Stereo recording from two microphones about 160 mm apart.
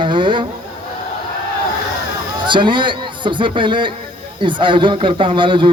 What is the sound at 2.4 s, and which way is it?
A man's voice, 30° right (ahead or behind).